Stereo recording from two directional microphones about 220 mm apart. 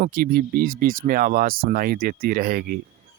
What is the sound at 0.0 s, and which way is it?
Speech, 40° right (ahead or behind).